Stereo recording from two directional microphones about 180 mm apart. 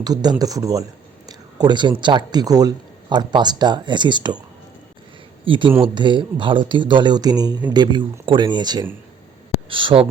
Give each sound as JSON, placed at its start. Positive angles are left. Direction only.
{"t": 0.0, "sound": "speech", "side_deg": -20}
{"t": 5.5, "sound": "speech", "side_deg": -30}